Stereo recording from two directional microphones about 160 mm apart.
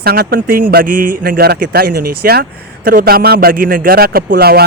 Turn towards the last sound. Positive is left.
turn(degrees=-75)  # may be behind; listen again after turning